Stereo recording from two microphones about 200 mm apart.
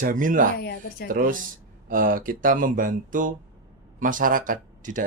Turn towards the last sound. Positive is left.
turn(degrees=-40)  # may be behind; listen again after turning